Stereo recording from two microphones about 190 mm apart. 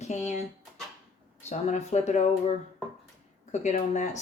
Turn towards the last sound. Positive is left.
turn(degrees=40)  # may be behind; listen again after turning